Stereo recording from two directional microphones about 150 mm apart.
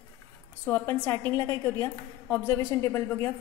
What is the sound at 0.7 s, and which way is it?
A woman's voice, 15° left (ahead or behind).